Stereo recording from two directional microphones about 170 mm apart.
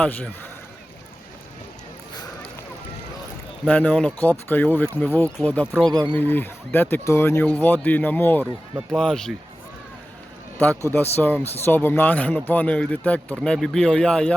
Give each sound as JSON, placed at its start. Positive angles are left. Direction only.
{"t": 0.0, "sound": "speech", "side_deg": 10}
{"t": 3.7, "sound": "speech", "side_deg": 10}
{"t": 5.9, "sound": "speech", "side_deg": -25}
{"t": 6.1, "sound": "speech", "side_deg": 10}
{"t": 10.8, "sound": "speech", "side_deg": 15}